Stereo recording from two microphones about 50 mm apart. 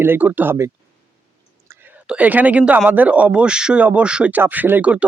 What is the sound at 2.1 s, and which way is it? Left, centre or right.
Speech, right.